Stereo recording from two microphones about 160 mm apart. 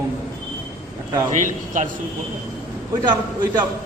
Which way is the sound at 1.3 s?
50° right (ahead or behind).